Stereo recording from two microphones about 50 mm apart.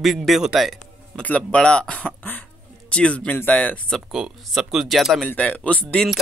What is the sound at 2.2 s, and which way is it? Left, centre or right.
Cough, left.